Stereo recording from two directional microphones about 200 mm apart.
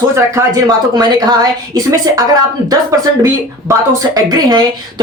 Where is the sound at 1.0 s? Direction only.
20° right (ahead or behind).